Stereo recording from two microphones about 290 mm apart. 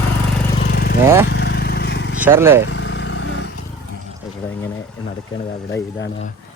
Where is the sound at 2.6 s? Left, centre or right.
Left.